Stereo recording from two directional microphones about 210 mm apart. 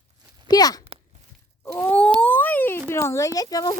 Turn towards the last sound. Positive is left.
turn(degrees=15)  # may be behind; listen again after turning